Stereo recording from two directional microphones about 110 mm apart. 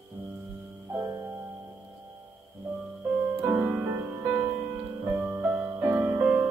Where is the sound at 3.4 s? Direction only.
20° right (ahead or behind).